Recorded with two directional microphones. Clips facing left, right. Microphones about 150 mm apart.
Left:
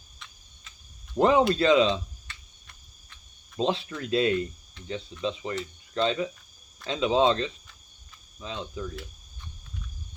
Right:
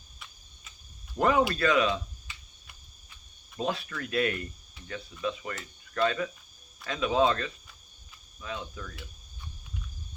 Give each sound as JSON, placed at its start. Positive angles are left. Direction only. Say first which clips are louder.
{"t": 1.2, "sound": "speech", "louder": "left 4 dB", "side_deg": 25}
{"t": 3.6, "sound": "speech", "louder": "left 4 dB", "side_deg": 25}